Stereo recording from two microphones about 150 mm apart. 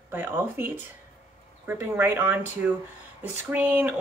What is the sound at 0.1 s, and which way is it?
Speech, 15° right (ahead or behind).